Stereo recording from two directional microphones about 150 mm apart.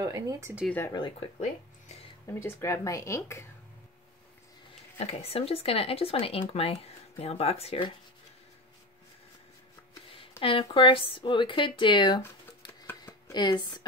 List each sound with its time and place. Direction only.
0.0 s speech: 25° right (ahead or behind)
0.7 s speech: 15° left (ahead or behind)
2.2 s speech: 20° left (ahead or behind)
4.9 s speech: 45° left (ahead or behind)
10.4 s speech: 15° left (ahead or behind)
10.7 s speech: 35° left (ahead or behind)
13.3 s speech: 30° left (ahead or behind)